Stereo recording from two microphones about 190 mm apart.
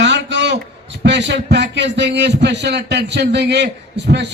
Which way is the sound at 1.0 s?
65° right (ahead or behind).